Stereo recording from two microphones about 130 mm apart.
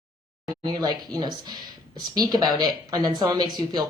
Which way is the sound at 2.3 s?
30° right (ahead or behind).